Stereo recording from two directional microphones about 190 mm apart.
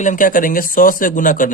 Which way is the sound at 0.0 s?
45° left (ahead or behind).